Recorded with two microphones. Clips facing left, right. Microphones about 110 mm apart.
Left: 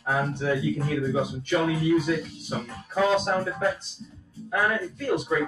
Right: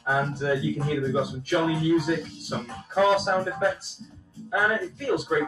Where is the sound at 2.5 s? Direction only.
25° right (ahead or behind).